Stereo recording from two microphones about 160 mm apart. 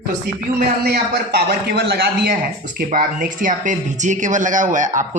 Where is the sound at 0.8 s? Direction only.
85° right.